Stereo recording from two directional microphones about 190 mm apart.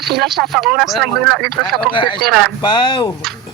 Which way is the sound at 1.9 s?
25° left (ahead or behind).